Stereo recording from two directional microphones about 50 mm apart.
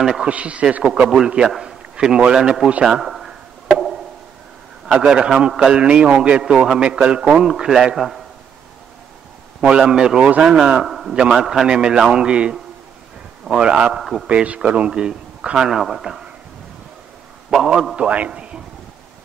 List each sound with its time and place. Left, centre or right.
0.0 s a man's voice: centre
0.3 s a man's voice: right
1.4 s a man's voice: centre
2.7 s chop: centre
4.9 s a man's voice: centre
7.4 s a man's voice: centre
9.6 s a man's voice: centre
10.9 s a sound: centre
11.3 s a man's voice: centre
13.9 s a man's voice: centre
14.2 s a man's voice: right; by 16.3 s centre
17.5 s a man's voice: centre